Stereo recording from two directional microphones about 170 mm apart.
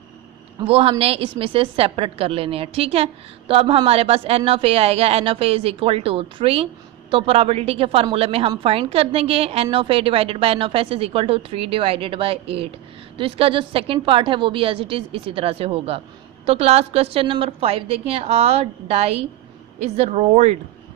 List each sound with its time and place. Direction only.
0.6 s speech: 35° right (ahead or behind)